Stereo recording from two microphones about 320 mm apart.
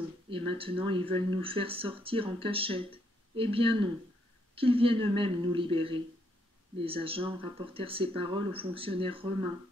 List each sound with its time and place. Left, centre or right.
0.3 s speech: centre